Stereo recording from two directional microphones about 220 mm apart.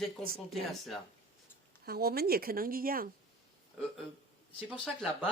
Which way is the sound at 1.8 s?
45° right (ahead or behind).